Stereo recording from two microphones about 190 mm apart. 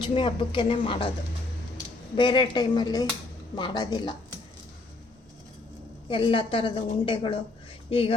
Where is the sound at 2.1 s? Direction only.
25° left (ahead or behind).